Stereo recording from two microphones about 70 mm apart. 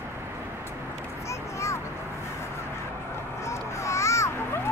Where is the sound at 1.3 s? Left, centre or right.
Left.